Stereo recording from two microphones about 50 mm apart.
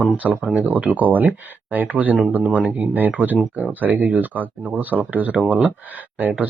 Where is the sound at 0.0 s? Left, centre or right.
Right.